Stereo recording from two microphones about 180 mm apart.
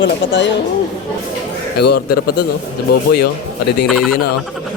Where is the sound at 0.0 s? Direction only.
90° left.